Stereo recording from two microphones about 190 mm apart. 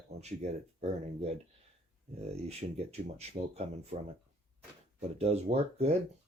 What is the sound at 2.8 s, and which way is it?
Speech, 35° right (ahead or behind).